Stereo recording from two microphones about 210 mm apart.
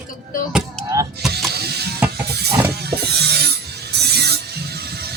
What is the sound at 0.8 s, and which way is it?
Vehicle, 5° left (ahead or behind).